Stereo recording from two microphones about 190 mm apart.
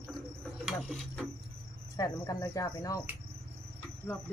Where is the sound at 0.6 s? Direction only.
Centre (ahead or behind).